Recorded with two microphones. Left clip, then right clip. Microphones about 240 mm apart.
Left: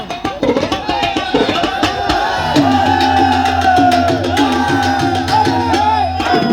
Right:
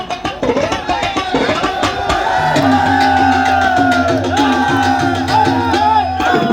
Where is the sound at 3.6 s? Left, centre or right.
Left.